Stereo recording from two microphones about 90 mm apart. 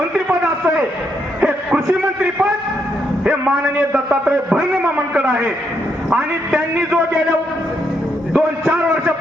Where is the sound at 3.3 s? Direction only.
10° right (ahead or behind).